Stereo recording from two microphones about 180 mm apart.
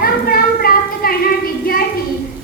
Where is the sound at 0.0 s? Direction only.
55° left (ahead or behind).